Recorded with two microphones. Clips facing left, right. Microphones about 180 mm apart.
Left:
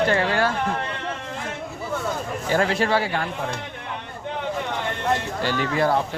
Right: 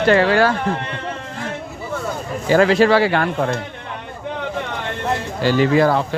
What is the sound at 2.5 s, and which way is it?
Speech, 90° right.